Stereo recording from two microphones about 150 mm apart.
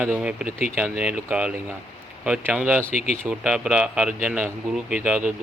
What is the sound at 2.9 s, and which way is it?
Speech, 65° right (ahead or behind).